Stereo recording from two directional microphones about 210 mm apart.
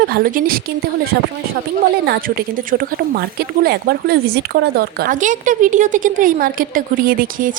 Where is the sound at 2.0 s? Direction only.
45° right (ahead or behind).